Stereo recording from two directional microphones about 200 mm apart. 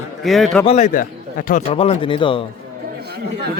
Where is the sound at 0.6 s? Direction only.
35° left (ahead or behind).